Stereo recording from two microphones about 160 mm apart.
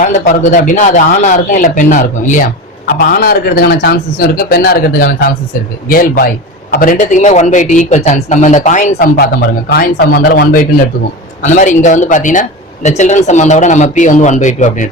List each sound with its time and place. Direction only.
0.0 s speech: 50° left (ahead or behind)
2.8 s speech: 65° left (ahead or behind)
6.9 s speech: 45° left (ahead or behind)
9.1 s speech: 85° left; by 10.8 s 60° left (ahead or behind)
11.4 s speech: 50° left (ahead or behind)